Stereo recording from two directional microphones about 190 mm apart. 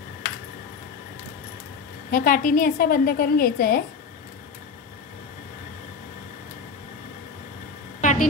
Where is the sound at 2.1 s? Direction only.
45° left (ahead or behind).